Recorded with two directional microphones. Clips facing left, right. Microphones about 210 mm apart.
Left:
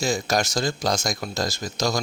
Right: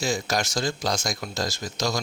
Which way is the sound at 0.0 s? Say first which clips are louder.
Left 3 dB; 40° left (ahead or behind).